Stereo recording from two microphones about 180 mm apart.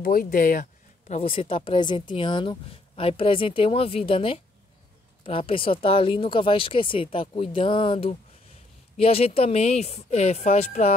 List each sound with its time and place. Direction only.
0.0 s speech: 50° left (ahead or behind)